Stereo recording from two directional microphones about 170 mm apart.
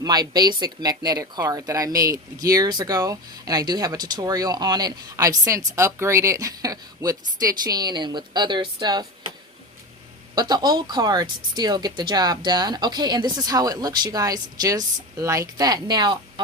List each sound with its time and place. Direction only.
0.0 s speech: 25° right (ahead or behind)
10.3 s speech: 25° right (ahead or behind)